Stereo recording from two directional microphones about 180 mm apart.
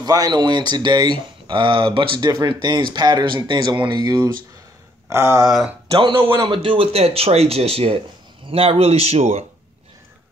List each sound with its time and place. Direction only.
0.0 s speech: 20° right (ahead or behind)
5.1 s a sound: 15° right (ahead or behind)
5.9 s speech: 30° right (ahead or behind)